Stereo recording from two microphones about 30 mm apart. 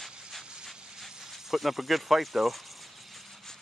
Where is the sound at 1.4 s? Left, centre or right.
Centre.